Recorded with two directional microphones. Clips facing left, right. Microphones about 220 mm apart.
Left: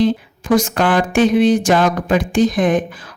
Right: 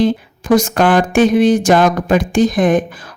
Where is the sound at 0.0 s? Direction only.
45° right (ahead or behind).